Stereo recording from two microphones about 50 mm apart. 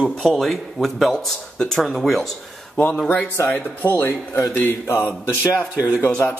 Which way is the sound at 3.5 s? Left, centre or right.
Left.